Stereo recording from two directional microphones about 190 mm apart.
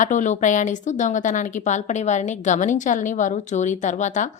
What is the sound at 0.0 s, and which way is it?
A woman's voice, 40° left (ahead or behind).